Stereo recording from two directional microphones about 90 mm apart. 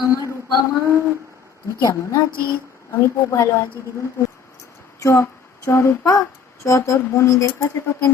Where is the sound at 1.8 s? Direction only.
40° left (ahead or behind).